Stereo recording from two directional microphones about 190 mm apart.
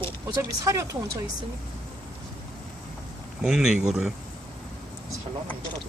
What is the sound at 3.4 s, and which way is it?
Speech, 5° right (ahead or behind).